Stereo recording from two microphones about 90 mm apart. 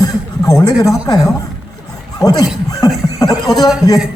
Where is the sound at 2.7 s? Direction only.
45° left (ahead or behind).